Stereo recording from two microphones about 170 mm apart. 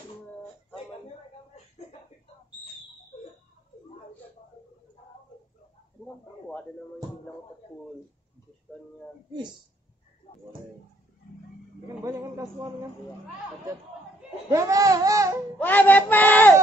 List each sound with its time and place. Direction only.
9.3 s music: 25° right (ahead or behind)
12.0 s music: 20° right (ahead or behind)
14.5 s music: 20° right (ahead or behind)
15.6 s a sound: 10° left (ahead or behind)